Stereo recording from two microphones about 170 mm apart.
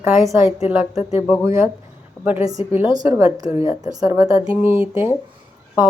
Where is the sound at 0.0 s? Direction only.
15° right (ahead or behind).